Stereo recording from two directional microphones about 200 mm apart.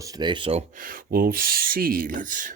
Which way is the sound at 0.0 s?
20° right (ahead or behind).